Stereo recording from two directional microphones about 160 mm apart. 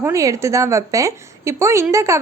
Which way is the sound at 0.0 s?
20° right (ahead or behind).